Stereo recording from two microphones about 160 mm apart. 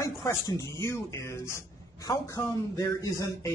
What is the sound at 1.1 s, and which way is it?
A man's voice, 20° left (ahead or behind).